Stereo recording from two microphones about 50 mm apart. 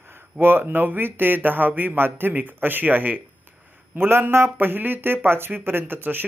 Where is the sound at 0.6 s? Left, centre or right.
Right.